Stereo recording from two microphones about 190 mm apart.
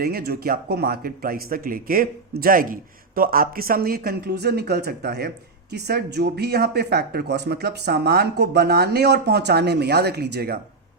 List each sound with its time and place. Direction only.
0.0 s speech: 55° right (ahead or behind)